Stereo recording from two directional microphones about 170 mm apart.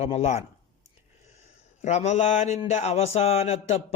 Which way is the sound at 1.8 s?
40° left (ahead or behind).